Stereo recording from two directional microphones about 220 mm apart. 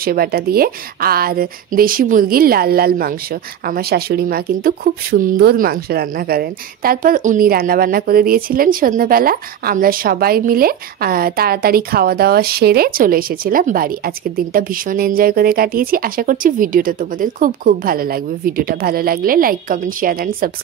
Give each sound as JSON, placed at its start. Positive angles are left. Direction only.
{"t": 0.0, "sound": "a woman's voice", "side_deg": -45}